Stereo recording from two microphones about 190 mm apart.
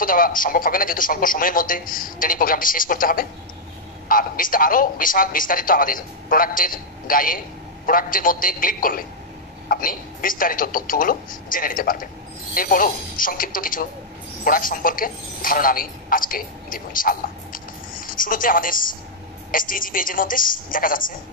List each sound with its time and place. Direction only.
0.0 s a man's voice: 45° left (ahead or behind)